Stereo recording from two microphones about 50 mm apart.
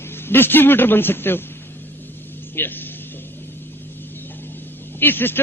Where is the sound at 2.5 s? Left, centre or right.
Left.